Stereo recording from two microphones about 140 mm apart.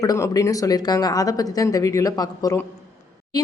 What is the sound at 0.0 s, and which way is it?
Speech, 25° left (ahead or behind).